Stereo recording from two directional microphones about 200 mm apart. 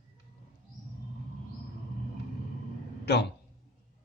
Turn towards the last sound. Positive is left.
turn(degrees=55)  # may be behind; listen again after turning